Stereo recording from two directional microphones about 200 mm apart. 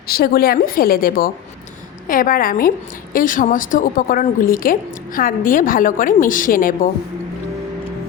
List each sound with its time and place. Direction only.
0.1 s a woman's voice: 50° left (ahead or behind)